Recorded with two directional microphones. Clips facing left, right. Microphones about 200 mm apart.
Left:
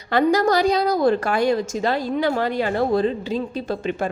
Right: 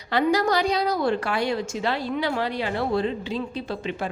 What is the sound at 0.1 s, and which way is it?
A woman's voice, 45° left (ahead or behind).